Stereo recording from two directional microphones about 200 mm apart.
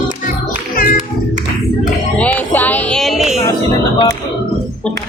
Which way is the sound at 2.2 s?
10° left (ahead or behind).